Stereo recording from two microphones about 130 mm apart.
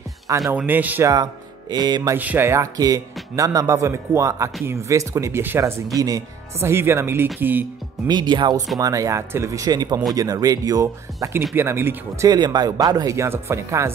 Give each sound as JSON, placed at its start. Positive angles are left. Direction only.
{"t": 0.5, "sound": "speech", "side_deg": -15}
{"t": 1.0, "sound": "speech", "side_deg": -30}
{"t": 2.1, "sound": "speech", "side_deg": -15}
{"t": 8.1, "sound": "speech", "side_deg": -35}
{"t": 12.3, "sound": "speech", "side_deg": -30}